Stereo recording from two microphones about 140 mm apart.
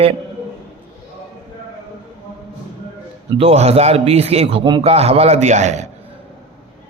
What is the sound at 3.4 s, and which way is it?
Speech, 50° right (ahead or behind).